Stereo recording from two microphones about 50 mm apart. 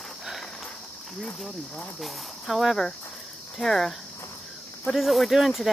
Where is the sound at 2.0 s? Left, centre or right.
Centre.